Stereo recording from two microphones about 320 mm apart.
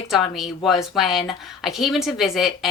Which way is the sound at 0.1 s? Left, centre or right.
Centre.